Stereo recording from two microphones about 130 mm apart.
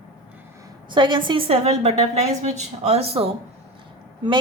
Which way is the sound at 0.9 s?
35° right (ahead or behind).